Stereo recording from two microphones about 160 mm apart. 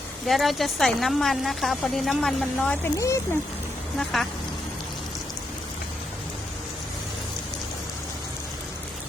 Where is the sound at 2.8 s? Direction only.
20° left (ahead or behind).